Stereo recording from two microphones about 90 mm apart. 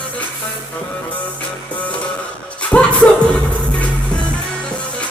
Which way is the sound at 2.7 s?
10° left (ahead or behind).